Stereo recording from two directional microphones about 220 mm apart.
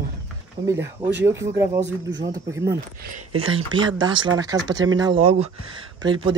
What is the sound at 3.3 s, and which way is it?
Speech, 65° right (ahead or behind).